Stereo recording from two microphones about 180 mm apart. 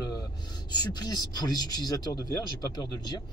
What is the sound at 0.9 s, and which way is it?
Speech, 20° left (ahead or behind).